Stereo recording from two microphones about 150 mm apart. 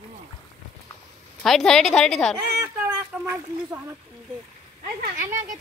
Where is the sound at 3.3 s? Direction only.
20° right (ahead or behind).